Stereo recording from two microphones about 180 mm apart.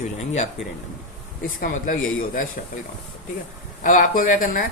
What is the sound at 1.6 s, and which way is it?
Speech, 50° left (ahead or behind).